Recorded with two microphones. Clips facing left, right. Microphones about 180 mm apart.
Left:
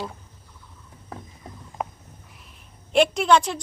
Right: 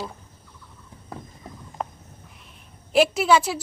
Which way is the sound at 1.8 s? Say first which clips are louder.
Left 1 dB; 5° left (ahead or behind).